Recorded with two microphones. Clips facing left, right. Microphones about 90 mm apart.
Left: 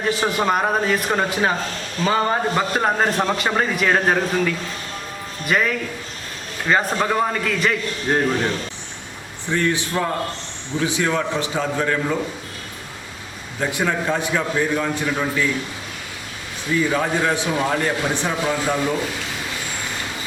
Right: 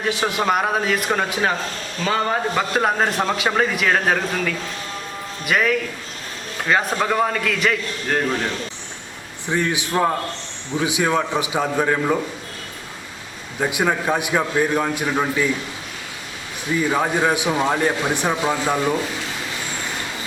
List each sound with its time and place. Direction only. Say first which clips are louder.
0.0 s a man's voice: left 1 dB; 5° right (ahead or behind)
9.5 s speech: even; 15° right (ahead or behind)
13.6 s speech: right 1 dB; 15° right (ahead or behind)
16.9 s speech: right 1 dB; 15° right (ahead or behind)